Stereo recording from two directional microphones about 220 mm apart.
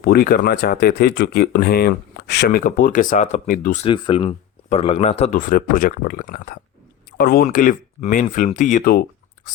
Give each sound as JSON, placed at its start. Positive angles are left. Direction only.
{"t": 0.0, "sound": "speech", "side_deg": 45}
{"t": 2.6, "sound": "speech", "side_deg": 35}
{"t": 3.8, "sound": "speech", "side_deg": 20}